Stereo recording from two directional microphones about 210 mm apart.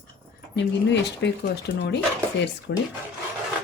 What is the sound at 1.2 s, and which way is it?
Speech, 55° left (ahead or behind).